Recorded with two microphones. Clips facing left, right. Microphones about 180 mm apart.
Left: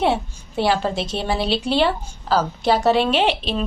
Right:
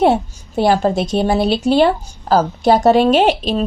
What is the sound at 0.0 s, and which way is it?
Speech, 45° right (ahead or behind).